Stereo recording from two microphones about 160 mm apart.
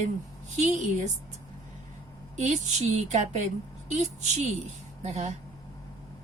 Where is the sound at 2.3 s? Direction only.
50° right (ahead or behind).